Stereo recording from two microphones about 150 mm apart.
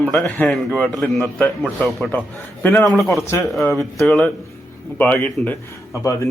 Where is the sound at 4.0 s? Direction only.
5° left (ahead or behind).